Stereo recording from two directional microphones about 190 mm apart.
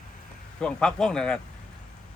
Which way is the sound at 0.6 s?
5° left (ahead or behind).